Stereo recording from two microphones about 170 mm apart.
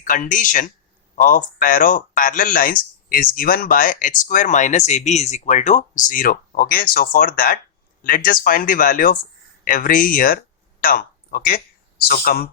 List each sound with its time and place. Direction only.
0.0 s speech: 50° left (ahead or behind)